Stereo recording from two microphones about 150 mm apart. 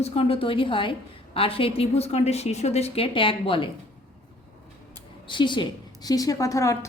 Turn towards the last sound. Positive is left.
turn(degrees=20)  # may be behind; listen again after turning